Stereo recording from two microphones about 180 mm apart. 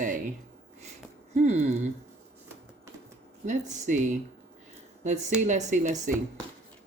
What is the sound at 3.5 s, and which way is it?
Speech, 45° right (ahead or behind).